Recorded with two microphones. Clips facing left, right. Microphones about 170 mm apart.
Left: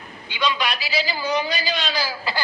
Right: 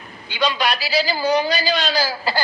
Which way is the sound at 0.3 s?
35° right (ahead or behind).